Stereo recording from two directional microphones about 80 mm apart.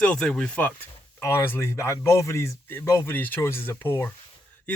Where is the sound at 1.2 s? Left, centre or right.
Left.